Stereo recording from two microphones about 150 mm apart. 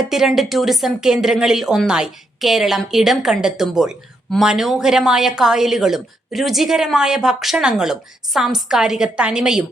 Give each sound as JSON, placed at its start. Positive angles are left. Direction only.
{"t": 0.0, "sound": "speech", "side_deg": 0}